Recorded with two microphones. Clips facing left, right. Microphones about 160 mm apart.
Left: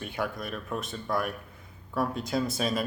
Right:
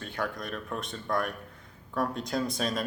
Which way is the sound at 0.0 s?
10° left (ahead or behind).